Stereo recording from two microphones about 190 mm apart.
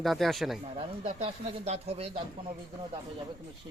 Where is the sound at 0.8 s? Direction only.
30° right (ahead or behind).